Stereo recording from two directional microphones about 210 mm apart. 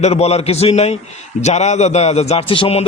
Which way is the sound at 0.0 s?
30° left (ahead or behind).